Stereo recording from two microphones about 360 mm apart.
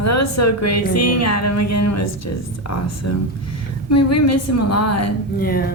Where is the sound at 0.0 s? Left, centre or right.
Left.